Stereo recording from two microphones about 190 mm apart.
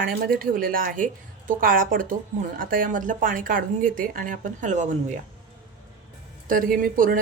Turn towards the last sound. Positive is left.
turn(degrees=-50)  # may be behind; listen again after turning